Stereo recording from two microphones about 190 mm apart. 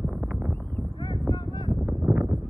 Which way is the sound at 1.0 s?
25° left (ahead or behind).